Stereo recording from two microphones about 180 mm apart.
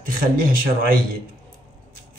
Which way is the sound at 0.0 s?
50° right (ahead or behind).